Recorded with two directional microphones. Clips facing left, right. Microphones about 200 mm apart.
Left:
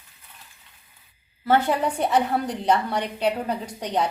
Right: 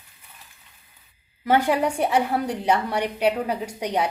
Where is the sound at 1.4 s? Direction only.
15° right (ahead or behind).